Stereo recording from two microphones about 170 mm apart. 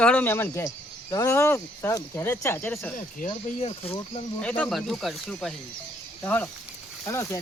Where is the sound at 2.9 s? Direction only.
50° left (ahead or behind).